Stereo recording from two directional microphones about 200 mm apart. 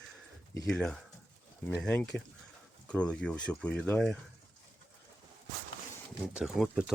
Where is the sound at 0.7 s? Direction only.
5° left (ahead or behind).